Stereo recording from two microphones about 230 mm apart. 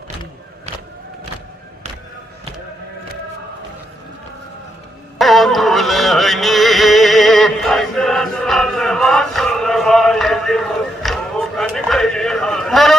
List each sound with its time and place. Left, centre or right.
5.1 s music: centre